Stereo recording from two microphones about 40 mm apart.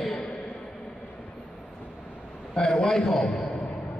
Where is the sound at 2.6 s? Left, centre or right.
Centre.